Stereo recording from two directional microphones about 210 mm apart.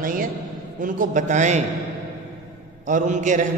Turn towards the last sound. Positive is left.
turn(degrees=-35)  # may be behind; listen again after turning